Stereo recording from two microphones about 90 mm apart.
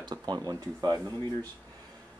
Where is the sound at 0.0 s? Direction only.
50° right (ahead or behind).